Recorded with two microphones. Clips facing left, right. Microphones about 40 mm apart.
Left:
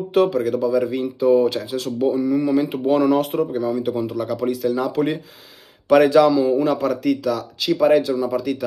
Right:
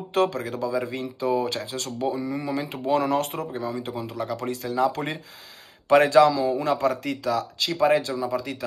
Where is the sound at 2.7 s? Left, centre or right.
Left.